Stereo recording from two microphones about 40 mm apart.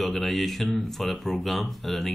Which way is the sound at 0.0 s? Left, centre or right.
Centre.